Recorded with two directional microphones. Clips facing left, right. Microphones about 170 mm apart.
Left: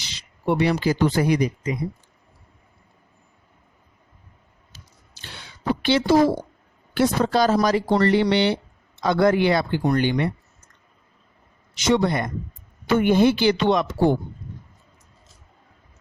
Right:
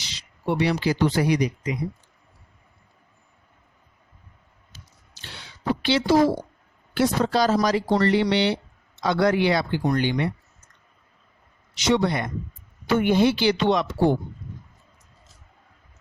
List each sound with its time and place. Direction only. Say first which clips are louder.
0.0 s speech: left 3 dB; 55° left (ahead or behind)
5.4 s a sound: left 1 dB; 50° left (ahead or behind)
6.9 s speech: left 2 dB; 50° left (ahead or behind)
11.7 s speech: left 2 dB; 50° left (ahead or behind)